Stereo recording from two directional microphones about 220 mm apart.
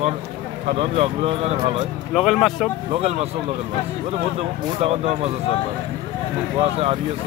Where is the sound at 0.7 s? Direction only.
25° right (ahead or behind).